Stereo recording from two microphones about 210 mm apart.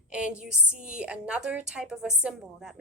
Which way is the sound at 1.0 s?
5° right (ahead or behind).